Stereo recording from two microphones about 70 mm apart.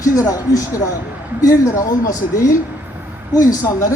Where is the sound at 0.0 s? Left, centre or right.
Left.